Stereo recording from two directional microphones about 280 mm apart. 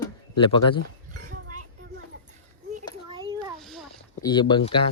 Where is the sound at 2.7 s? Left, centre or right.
Right.